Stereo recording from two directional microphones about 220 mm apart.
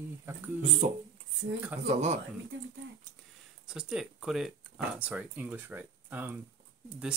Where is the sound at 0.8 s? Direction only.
35° right (ahead or behind).